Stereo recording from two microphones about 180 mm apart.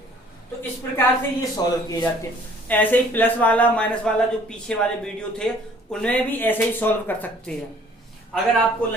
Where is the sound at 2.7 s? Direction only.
10° left (ahead or behind).